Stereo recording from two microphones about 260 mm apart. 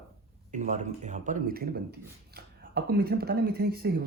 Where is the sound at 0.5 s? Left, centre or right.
Right.